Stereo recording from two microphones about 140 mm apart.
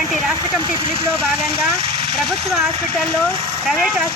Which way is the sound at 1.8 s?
45° right (ahead or behind).